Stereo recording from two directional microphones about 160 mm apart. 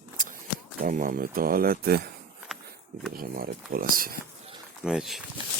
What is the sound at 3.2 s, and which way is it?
Speech, 65° right (ahead or behind).